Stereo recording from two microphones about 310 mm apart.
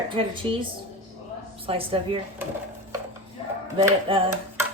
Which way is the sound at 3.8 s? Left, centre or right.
Centre.